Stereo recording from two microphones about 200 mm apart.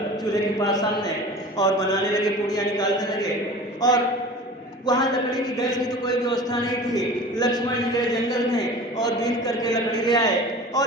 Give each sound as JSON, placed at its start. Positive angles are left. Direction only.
{"t": 0.6, "sound": "a man's voice", "side_deg": 20}